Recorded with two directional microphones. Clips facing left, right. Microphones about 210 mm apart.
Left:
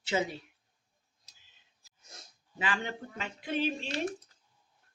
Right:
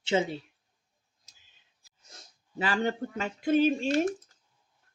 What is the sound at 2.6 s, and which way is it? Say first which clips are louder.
Speech: right 7 dB; 40° right (ahead or behind).